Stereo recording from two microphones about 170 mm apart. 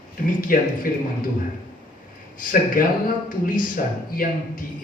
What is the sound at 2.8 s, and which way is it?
A man's voice, 55° left (ahead or behind).